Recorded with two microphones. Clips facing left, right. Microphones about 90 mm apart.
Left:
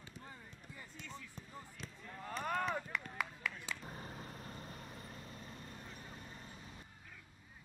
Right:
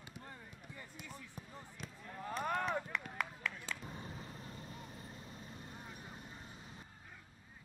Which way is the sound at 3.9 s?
40° left (ahead or behind).